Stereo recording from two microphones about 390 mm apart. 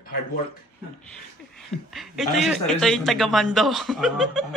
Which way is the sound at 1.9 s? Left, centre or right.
Centre.